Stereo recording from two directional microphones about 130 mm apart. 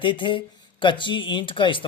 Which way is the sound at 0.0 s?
40° left (ahead or behind).